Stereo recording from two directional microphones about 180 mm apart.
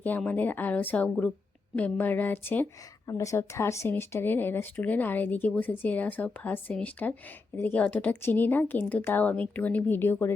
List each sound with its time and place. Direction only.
0.0 s speech: 10° left (ahead or behind)